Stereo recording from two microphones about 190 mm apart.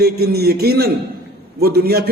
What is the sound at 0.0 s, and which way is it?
A man's voice, 55° right (ahead or behind).